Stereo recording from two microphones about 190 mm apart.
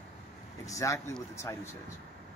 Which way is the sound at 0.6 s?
15° left (ahead or behind).